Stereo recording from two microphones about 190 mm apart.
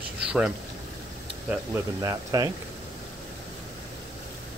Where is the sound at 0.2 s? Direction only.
5° right (ahead or behind).